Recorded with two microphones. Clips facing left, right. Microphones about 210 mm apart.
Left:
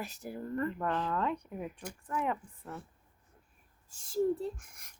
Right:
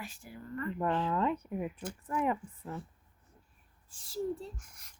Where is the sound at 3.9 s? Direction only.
50° left (ahead or behind).